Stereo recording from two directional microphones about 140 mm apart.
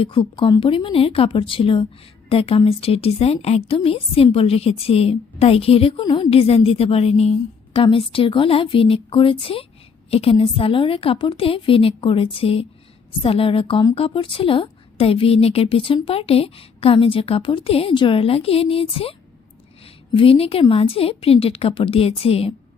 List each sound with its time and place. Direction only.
0.0 s a woman's voice: 40° left (ahead or behind)
20.1 s a woman's voice: 40° left (ahead or behind)